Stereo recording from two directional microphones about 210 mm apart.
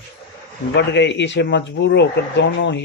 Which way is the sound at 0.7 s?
55° left (ahead or behind).